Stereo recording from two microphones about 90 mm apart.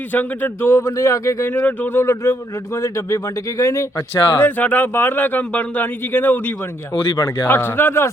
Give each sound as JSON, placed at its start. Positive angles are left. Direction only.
{"t": 0.1, "sound": "speech", "side_deg": 20}
{"t": 1.5, "sound": "speech", "side_deg": 20}
{"t": 4.4, "sound": "speech", "side_deg": 20}